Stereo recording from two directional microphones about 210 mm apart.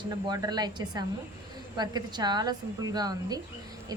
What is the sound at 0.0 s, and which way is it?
A woman's voice, 20° right (ahead or behind).